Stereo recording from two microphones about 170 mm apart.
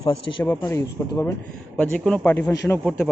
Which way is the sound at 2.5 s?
20° left (ahead or behind).